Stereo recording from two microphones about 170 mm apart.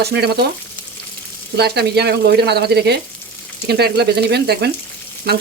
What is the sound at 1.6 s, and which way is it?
Speech, 75° right (ahead or behind).